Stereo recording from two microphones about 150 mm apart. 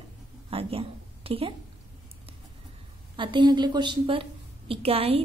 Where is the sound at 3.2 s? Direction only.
30° right (ahead or behind).